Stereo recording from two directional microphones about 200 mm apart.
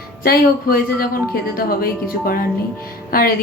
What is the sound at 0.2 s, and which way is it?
Speech, 45° left (ahead or behind).